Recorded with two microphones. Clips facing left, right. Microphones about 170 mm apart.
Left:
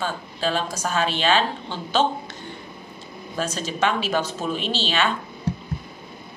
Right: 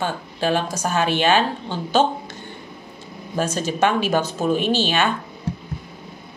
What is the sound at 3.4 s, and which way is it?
Speech, 50° right (ahead or behind).